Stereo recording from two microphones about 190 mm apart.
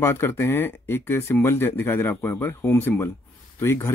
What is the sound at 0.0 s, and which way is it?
Speech, 10° left (ahead or behind).